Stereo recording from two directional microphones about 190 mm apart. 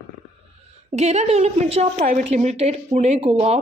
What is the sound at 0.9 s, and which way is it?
A woman's voice, 35° right (ahead or behind).